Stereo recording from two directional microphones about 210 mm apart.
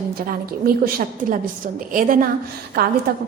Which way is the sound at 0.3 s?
45° right (ahead or behind).